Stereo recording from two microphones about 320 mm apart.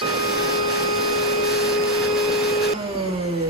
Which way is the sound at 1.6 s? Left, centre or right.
Centre.